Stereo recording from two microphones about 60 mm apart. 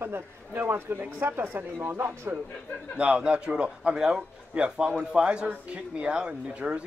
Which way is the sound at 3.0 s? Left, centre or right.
Centre.